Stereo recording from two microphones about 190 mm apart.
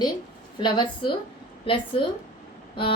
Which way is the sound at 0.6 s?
25° left (ahead or behind).